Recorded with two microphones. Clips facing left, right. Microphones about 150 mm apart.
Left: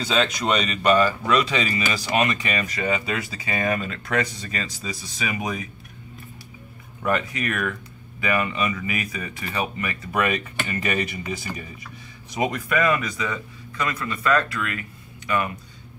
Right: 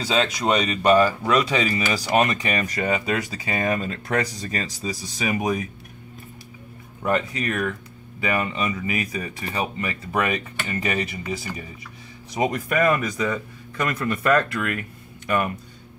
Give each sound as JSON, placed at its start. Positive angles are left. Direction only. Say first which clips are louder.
{"t": 0.0, "sound": "speech", "louder": "right 1 dB", "side_deg": -15}
{"t": 2.0, "sound": "speech", "louder": "right 3 dB", "side_deg": -40}
{"t": 7.0, "sound": "speech", "louder": "right 1 dB", "side_deg": -30}
{"t": 12.4, "sound": "a man's voice", "louder": "right 1 dB", "side_deg": -40}